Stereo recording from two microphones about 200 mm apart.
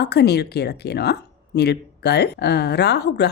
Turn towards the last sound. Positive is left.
turn(degrees=55)  # may be behind; listen again after turning